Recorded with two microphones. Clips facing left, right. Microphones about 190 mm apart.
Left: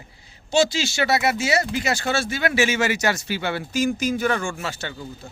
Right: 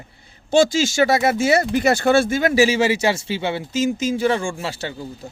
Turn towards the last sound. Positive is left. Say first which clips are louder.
# right 3 dB
turn(degrees=-35)  # may be behind; listen again after turning